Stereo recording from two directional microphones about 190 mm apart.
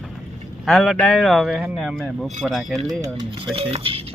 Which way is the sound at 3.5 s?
30° right (ahead or behind).